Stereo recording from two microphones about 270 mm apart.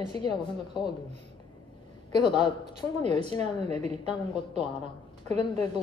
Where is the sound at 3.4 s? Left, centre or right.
Right.